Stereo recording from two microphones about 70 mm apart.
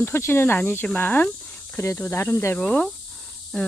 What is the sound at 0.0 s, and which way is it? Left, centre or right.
Speech, left.